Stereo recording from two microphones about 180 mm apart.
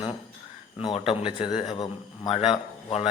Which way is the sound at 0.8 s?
30° left (ahead or behind).